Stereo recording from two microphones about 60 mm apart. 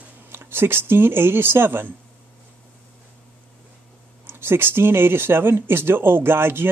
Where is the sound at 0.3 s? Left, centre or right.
Right.